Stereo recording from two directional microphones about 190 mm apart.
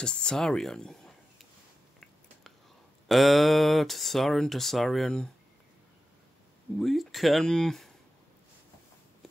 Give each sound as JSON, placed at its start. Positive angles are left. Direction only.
{"t": 0.0, "sound": "speech", "side_deg": 5}
{"t": 3.1, "sound": "speech", "side_deg": 0}
{"t": 6.8, "sound": "speech", "side_deg": 0}